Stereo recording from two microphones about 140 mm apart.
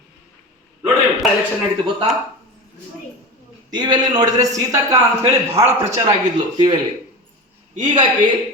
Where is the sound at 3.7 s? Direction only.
30° right (ahead or behind).